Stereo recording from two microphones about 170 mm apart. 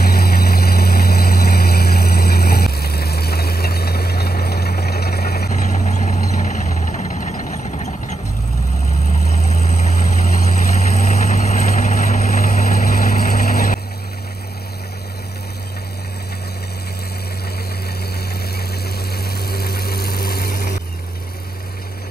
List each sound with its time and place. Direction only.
0.0 s vehicle: 65° left (ahead or behind)
5.5 s vehicle: 45° left (ahead or behind); by 13.7 s 60° left (ahead or behind)
18.9 s vehicle: 65° left (ahead or behind)